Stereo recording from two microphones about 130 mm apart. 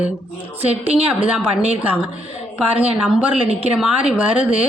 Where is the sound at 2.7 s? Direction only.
10° right (ahead or behind).